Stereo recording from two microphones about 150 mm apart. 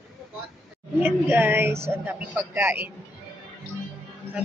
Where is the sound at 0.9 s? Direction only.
15° right (ahead or behind).